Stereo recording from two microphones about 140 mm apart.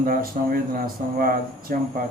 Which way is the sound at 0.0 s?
90° right.